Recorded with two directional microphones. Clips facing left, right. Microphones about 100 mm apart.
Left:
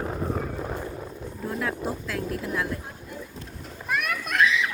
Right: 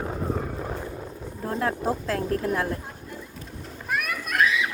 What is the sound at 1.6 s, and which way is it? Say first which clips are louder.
Speech: right 6 dB; 40° right (ahead or behind).